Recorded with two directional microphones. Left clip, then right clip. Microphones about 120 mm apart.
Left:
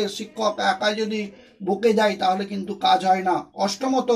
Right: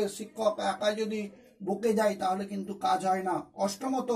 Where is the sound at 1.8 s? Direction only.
Centre (ahead or behind).